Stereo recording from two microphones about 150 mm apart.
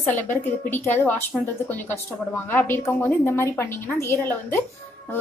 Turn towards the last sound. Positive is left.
turn(degrees=15)  # may be behind; listen again after turning